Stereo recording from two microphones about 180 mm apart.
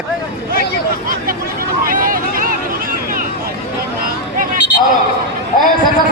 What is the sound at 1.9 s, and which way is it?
Vehicle, 50° right (ahead or behind).